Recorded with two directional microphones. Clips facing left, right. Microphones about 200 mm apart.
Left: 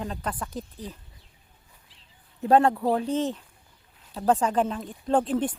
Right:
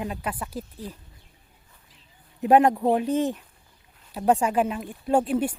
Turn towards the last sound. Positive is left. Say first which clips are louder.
# right 1 dB
turn(degrees=-10)  # may be behind; listen again after turning